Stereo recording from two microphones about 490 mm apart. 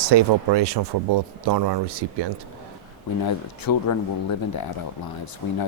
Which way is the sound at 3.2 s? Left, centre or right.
Left.